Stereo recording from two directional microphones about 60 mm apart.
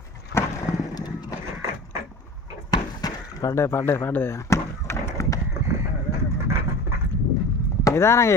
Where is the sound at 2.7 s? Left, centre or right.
Left.